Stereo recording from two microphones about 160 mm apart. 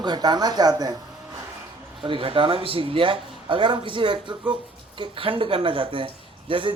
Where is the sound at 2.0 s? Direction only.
35° right (ahead or behind).